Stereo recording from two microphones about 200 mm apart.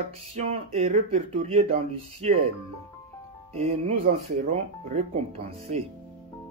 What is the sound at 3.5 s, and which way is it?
Speech, 30° right (ahead or behind).